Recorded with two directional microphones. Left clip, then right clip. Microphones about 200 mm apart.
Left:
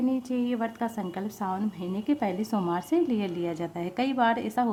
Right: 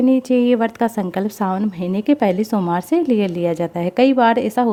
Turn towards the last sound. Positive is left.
turn(degrees=-30)  # may be behind; listen again after turning